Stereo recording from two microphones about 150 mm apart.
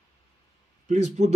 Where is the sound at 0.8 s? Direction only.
50° right (ahead or behind).